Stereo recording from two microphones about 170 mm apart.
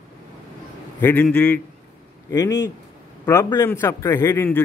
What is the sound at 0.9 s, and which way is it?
A man's voice, 10° left (ahead or behind).